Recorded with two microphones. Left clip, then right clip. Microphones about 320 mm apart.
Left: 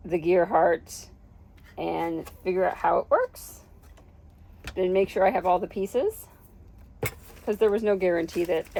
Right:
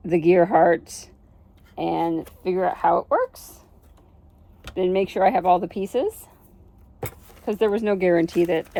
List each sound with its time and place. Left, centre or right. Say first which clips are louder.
0.0 s speech: right 5 dB; right
4.7 s speech: right 2 dB; right
7.4 s speech: right 1 dB; right